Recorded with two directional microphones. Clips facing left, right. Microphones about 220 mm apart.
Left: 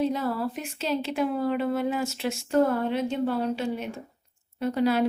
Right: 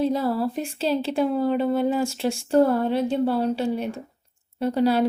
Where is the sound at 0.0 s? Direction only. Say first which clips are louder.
Right 4 dB; 35° right (ahead or behind).